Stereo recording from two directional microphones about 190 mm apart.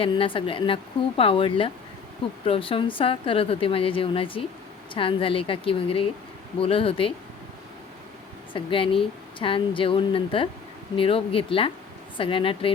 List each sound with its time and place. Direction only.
0.0 s speech: 30° left (ahead or behind)
8.5 s speech: 25° left (ahead or behind)